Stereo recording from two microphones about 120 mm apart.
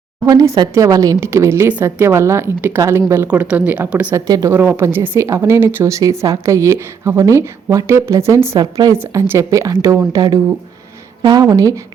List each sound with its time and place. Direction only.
0.3 s speech: 30° right (ahead or behind)
3.2 s speech: 10° right (ahead or behind)
4.1 s speech: 30° right (ahead or behind)
4.5 s speech: 15° right (ahead or behind)
8.5 s speech: 35° right (ahead or behind)
8.9 s speech: 20° right (ahead or behind)